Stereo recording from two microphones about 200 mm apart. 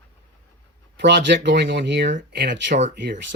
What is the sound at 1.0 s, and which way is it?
Speech, 60° right (ahead or behind).